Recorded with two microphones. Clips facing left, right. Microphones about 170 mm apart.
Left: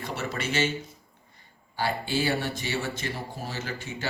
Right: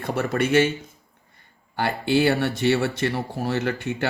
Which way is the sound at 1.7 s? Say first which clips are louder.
Right 6 dB; 60° right (ahead or behind).